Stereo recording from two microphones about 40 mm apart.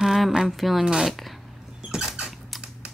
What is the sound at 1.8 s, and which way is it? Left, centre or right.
Rodents, centre.